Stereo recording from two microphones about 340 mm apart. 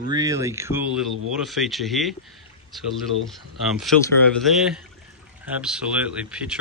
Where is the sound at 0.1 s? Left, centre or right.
Centre.